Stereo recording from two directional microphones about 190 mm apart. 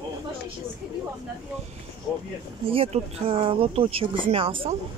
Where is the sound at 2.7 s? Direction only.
30° right (ahead or behind).